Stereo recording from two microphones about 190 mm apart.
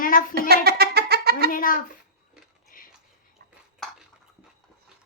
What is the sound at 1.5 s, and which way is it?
Speech, 45° left (ahead or behind).